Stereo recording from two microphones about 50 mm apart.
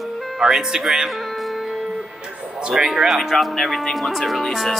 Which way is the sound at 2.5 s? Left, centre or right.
Centre.